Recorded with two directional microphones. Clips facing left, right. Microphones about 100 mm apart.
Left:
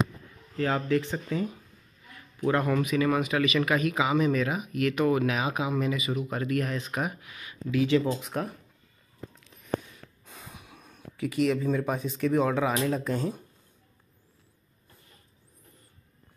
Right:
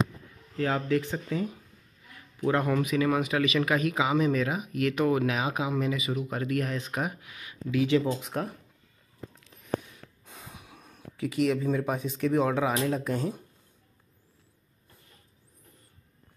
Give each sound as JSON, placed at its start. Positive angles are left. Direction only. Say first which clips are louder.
{"t": 0.6, "sound": "speech", "louder": "left 1 dB", "side_deg": -5}
{"t": 10.2, "sound": "speech", "louder": "even", "side_deg": -20}